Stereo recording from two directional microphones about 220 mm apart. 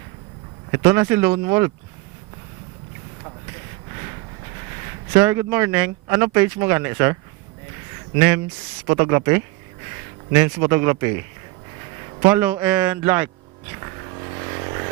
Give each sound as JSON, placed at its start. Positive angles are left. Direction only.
{"t": 0.7, "sound": "speech", "side_deg": -15}
{"t": 5.1, "sound": "speech", "side_deg": -10}
{"t": 8.9, "sound": "speech", "side_deg": -15}
{"t": 12.2, "sound": "speech", "side_deg": -10}
{"t": 14.4, "sound": "vehicle", "side_deg": -20}